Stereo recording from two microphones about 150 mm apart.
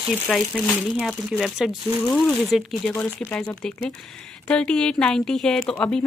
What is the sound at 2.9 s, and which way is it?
A woman's voice, 10° left (ahead or behind).